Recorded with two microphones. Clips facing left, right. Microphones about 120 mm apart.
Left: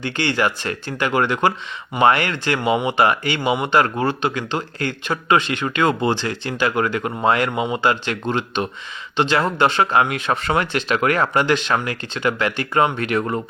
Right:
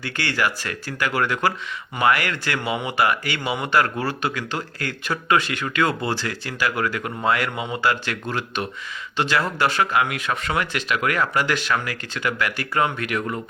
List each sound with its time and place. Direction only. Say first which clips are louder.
0.0 s speech: left 4 dB; 25° left (ahead or behind)